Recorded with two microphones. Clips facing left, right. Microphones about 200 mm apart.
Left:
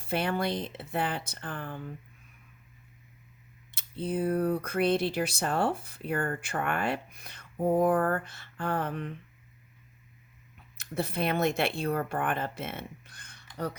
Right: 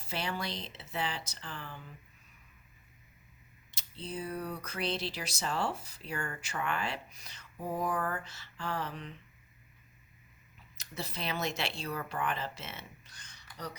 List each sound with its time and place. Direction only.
0.0 s speech: 55° left (ahead or behind)
3.7 s speech: 55° left (ahead or behind)
10.8 s speech: 55° left (ahead or behind)